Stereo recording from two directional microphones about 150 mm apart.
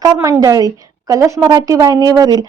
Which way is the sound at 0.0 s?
25° right (ahead or behind).